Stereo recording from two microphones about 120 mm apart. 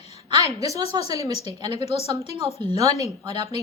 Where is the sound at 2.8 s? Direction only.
30° right (ahead or behind).